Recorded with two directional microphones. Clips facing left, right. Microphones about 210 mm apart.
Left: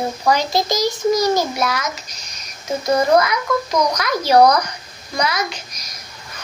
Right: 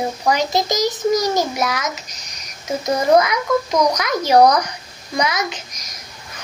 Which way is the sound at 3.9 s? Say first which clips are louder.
Even; 15° right (ahead or behind).